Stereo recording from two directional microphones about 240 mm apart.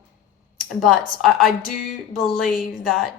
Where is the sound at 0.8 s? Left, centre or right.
Centre.